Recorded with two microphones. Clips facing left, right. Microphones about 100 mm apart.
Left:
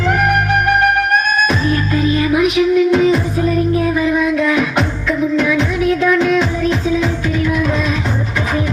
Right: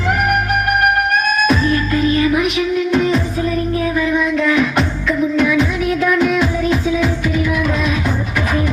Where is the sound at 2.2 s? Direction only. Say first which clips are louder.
Left 2 dB; centre (ahead or behind).